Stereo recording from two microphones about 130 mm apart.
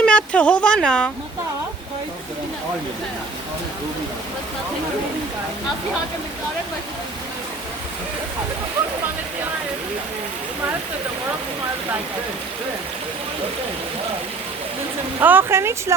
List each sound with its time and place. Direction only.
0.0 s a woman's voice: 10° left (ahead or behind)
15.2 s speech: 15° right (ahead or behind)